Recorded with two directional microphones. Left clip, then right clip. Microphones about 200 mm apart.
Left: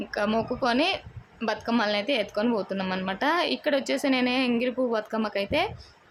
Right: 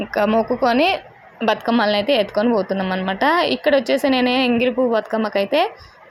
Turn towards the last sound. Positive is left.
turn(degrees=-10)  # may be behind; listen again after turning